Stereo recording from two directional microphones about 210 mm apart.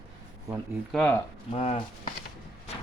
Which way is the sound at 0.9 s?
5° left (ahead or behind).